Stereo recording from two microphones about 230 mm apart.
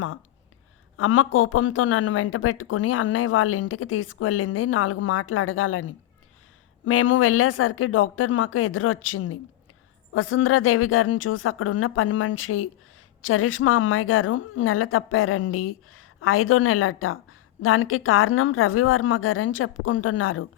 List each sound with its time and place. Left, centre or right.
0.9 s a woman's voice: left